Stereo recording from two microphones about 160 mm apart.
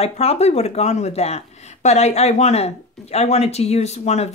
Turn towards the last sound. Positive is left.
turn(degrees=45)  # may be behind; listen again after turning